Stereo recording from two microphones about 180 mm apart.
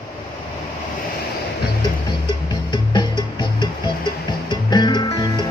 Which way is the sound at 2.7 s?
25° left (ahead or behind).